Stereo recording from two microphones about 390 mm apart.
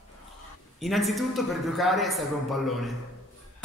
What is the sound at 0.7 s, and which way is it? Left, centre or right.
A man's voice, centre.